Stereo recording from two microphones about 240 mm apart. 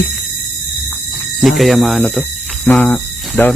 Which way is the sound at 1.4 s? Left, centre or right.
Centre.